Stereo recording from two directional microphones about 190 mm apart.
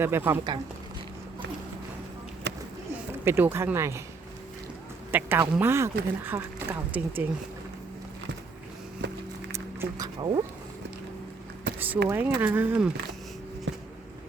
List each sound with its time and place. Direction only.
0.0 s speech: 10° right (ahead or behind)
2.5 s a sound: 70° right (ahead or behind)
3.2 s speech: 10° right (ahead or behind)
5.1 s speech: 10° right (ahead or behind)
9.0 s a sound: 65° right (ahead or behind)
10.0 s speech: 25° right (ahead or behind)
11.7 s vehicle: 65° right (ahead or behind)
12.0 s speech: 10° right (ahead or behind)
13.7 s a sound: 70° right (ahead or behind)